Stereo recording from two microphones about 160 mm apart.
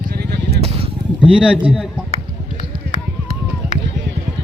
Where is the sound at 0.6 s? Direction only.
40° right (ahead or behind).